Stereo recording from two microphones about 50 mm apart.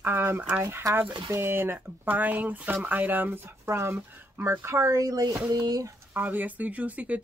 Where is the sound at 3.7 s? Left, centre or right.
Right.